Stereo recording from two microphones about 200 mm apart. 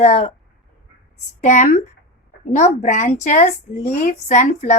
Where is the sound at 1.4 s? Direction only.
40° left (ahead or behind).